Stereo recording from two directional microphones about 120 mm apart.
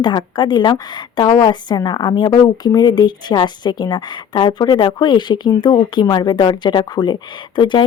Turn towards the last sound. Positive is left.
turn(degrees=40)  # may be behind; listen again after turning